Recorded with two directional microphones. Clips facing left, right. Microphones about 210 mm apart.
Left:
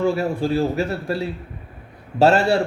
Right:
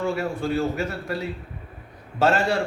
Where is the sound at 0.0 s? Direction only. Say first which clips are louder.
Left 5 dB; 30° left (ahead or behind).